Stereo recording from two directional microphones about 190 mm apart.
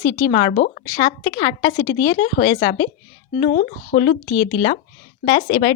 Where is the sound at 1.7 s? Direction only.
85° left.